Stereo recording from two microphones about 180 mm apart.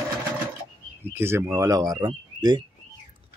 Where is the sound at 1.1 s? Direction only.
15° right (ahead or behind).